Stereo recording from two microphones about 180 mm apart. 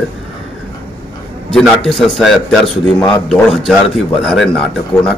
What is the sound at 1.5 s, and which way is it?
A man's voice, centre (ahead or behind).